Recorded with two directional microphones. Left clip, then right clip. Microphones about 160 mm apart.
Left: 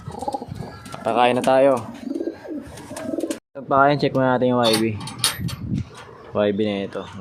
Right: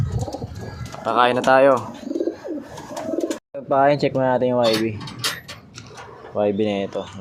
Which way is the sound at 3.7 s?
10° left (ahead or behind).